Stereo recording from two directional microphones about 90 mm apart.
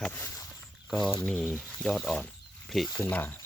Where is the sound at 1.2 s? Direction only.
15° left (ahead or behind).